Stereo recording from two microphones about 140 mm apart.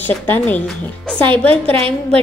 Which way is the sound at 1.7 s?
45° right (ahead or behind).